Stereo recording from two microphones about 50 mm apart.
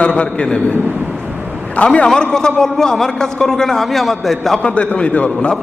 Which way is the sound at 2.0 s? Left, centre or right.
Centre.